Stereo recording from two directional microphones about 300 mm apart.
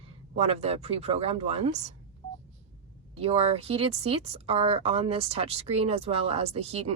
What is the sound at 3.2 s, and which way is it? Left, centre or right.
Speech, centre.